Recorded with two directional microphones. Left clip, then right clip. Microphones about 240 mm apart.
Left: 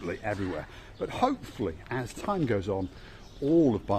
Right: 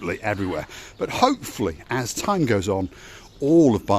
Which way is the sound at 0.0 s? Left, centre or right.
Right.